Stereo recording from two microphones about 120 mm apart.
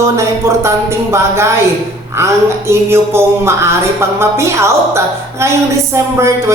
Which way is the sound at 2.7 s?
20° right (ahead or behind).